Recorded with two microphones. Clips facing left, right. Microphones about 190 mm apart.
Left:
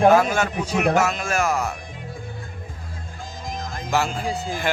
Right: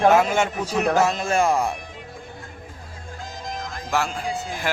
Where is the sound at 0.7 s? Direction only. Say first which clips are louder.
Left 1 dB; 15° left (ahead or behind).